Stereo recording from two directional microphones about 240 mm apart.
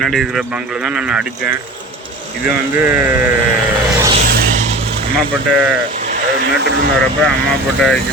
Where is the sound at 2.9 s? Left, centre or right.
Centre.